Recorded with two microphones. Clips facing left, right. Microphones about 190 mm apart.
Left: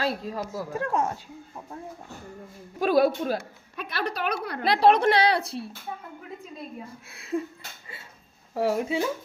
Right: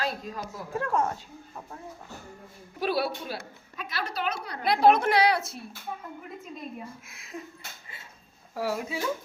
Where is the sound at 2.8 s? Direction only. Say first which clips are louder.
Left 7 dB; 45° left (ahead or behind).